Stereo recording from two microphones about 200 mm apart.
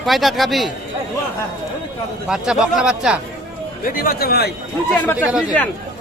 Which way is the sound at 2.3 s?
Centre (ahead or behind).